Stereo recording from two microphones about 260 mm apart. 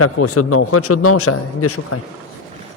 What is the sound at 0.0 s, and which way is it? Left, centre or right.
A man's voice, left.